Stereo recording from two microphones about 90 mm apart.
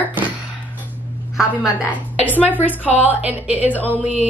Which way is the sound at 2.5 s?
20° left (ahead or behind).